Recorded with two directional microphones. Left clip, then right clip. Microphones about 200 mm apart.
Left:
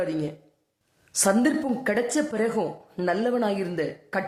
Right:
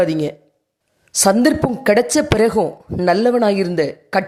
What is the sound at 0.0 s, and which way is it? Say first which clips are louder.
A woman's voice: right 11 dB; 40° right (ahead or behind).